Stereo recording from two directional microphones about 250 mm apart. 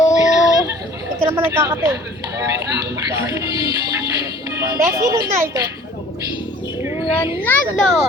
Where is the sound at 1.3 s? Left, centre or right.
Centre.